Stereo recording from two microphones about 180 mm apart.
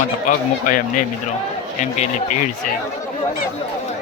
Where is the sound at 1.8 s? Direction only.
40° left (ahead or behind).